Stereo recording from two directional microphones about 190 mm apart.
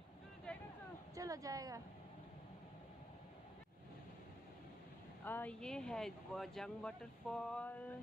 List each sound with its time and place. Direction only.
0.5 s a sound: 5° left (ahead or behind)
1.1 s speech: 20° right (ahead or behind)
5.2 s speech: 10° left (ahead or behind)